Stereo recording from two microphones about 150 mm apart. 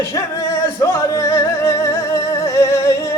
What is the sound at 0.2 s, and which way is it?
Speech, 25° left (ahead or behind).